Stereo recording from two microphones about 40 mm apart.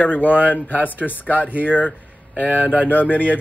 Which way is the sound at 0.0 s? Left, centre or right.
Left.